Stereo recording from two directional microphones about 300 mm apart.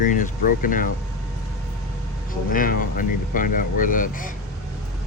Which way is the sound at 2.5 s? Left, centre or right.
Left.